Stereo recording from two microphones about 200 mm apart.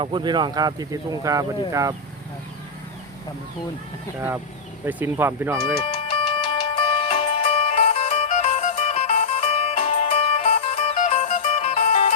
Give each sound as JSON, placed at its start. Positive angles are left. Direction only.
{"t": 0.0, "sound": "speech", "side_deg": -20}
{"t": 4.9, "sound": "speech", "side_deg": -10}
{"t": 5.8, "sound": "music", "side_deg": 25}